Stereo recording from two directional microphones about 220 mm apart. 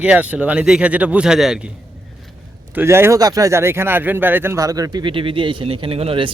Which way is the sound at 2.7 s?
10° right (ahead or behind).